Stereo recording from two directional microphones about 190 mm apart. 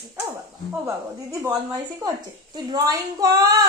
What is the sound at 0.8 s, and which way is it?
A woman's voice, 15° right (ahead or behind).